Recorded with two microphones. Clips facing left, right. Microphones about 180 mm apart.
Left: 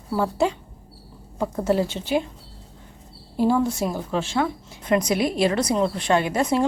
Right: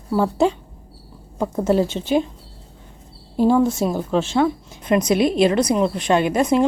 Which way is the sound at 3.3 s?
20° right (ahead or behind).